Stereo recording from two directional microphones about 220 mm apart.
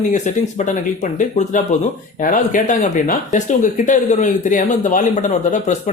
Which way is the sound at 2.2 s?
35° left (ahead or behind).